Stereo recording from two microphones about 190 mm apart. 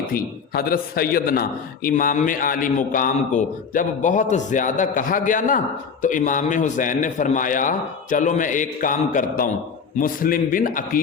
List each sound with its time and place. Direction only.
0.1 s a man's voice: 50° left (ahead or behind)